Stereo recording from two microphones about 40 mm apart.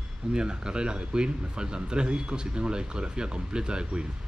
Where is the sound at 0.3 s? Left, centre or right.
Right.